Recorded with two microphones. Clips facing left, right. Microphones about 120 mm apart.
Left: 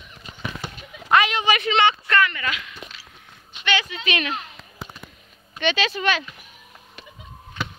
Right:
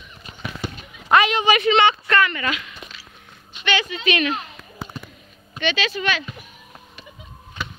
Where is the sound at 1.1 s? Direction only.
30° right (ahead or behind).